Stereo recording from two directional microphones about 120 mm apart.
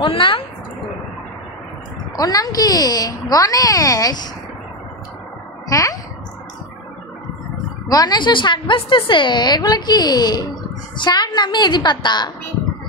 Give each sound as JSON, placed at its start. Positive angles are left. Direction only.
{"t": 0.0, "sound": "a woman's voice", "side_deg": 45}
{"t": 2.1, "sound": "a woman's voice", "side_deg": 30}
{"t": 5.7, "sound": "a child's voice", "side_deg": 30}
{"t": 7.9, "sound": "a woman's voice", "side_deg": 35}